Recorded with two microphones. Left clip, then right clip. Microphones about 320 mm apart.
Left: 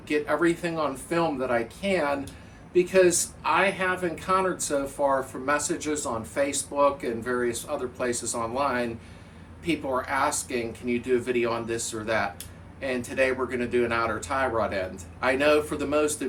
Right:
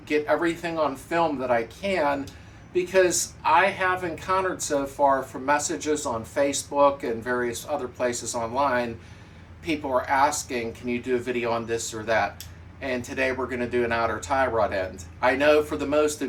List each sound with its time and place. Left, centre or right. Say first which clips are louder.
0.1 s speech: right 1 dB; centre